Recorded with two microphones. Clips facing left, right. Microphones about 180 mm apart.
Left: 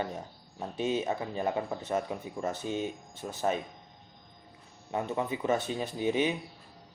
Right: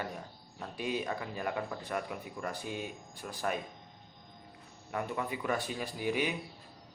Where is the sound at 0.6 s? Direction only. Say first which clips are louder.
Left 5 dB; 25° left (ahead or behind).